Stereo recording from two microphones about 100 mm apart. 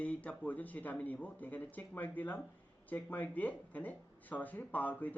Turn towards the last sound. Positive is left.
turn(degrees=15)  # may be behind; listen again after turning